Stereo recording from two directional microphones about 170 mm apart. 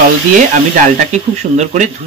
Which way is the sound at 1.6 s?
45° right (ahead or behind).